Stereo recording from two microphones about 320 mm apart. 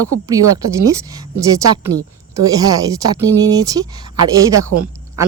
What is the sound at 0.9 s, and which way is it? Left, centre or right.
Speech, centre.